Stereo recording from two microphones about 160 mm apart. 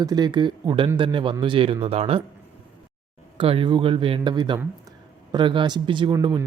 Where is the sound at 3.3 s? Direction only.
35° right (ahead or behind).